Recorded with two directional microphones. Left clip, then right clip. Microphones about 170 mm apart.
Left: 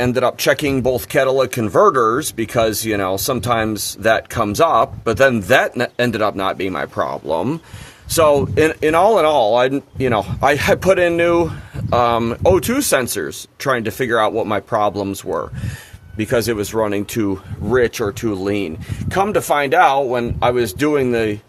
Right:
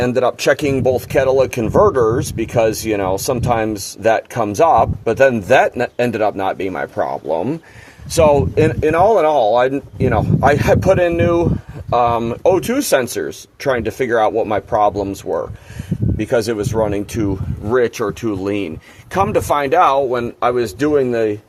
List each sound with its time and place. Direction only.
0.0 s speech: 10° left (ahead or behind)
19.1 s speech: centre (ahead or behind); by 21.3 s 20° left (ahead or behind)